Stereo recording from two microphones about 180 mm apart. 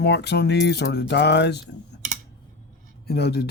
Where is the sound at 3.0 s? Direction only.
65° left (ahead or behind).